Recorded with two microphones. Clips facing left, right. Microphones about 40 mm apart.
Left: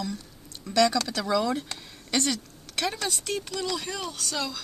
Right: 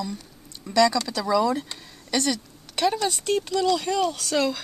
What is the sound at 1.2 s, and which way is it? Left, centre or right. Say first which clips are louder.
Speech: right 5 dB; right.